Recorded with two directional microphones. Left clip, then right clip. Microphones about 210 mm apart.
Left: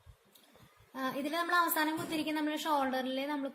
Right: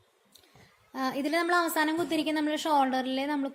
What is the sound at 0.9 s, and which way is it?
A woman's voice, 40° right (ahead or behind).